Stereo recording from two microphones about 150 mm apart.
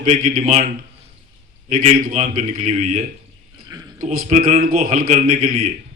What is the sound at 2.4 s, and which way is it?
Speech, 45° right (ahead or behind).